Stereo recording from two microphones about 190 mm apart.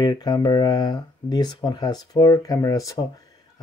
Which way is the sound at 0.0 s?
20° left (ahead or behind).